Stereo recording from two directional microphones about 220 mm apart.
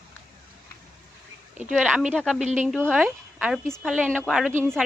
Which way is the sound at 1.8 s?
5° right (ahead or behind).